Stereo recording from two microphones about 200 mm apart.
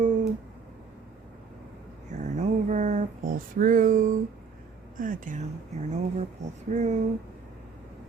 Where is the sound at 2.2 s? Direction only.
40° right (ahead or behind).